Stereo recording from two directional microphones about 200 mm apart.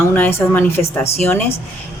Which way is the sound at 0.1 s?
10° left (ahead or behind).